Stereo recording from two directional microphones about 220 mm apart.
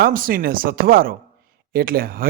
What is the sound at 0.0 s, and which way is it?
A man's voice, 40° right (ahead or behind).